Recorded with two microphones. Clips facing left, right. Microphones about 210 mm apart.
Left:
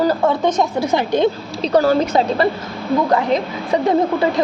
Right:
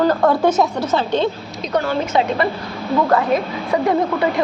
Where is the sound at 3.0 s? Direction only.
15° left (ahead or behind).